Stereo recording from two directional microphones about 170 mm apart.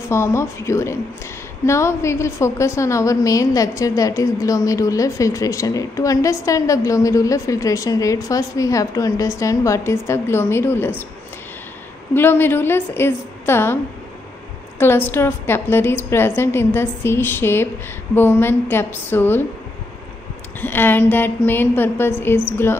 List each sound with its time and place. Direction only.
0.1 s a woman's voice: 15° left (ahead or behind)
12.1 s a woman's voice: 10° left (ahead or behind)
14.8 s a woman's voice: 10° left (ahead or behind)
20.6 s a woman's voice: 10° left (ahead or behind)